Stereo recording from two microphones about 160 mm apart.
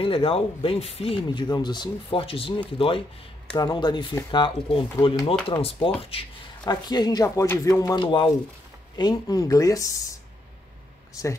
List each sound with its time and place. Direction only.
0.0 s speech: 35° left (ahead or behind)
5.6 s speech: 35° left (ahead or behind)
6.6 s speech: 25° left (ahead or behind)